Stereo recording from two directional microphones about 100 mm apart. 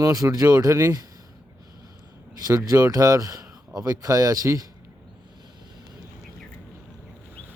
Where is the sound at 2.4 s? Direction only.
40° right (ahead or behind).